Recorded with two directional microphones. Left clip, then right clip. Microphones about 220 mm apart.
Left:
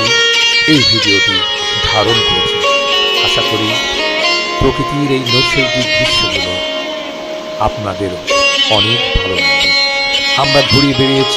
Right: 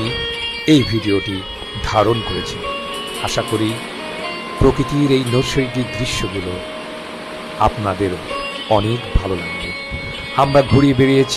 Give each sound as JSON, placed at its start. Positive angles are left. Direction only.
{"t": 0.0, "sound": "music", "side_deg": 40}
{"t": 0.7, "sound": "speech", "side_deg": 45}
{"t": 2.1, "sound": "music", "side_deg": 45}
{"t": 5.6, "sound": "speech", "side_deg": 45}
{"t": 8.3, "sound": "music", "side_deg": 40}
{"t": 10.3, "sound": "speech", "side_deg": 0}
{"t": 11.0, "sound": "speech", "side_deg": 45}